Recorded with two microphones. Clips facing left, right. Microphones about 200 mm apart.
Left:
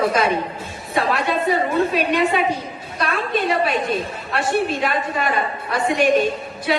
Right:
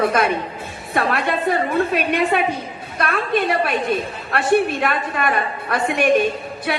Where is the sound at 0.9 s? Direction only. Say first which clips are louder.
Even; 55° right (ahead or behind).